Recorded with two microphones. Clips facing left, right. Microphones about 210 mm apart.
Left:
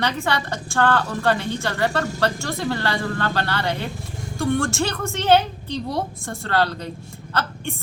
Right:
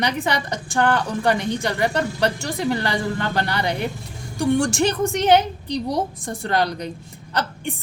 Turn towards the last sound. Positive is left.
turn(degrees=-15)  # may be behind; listen again after turning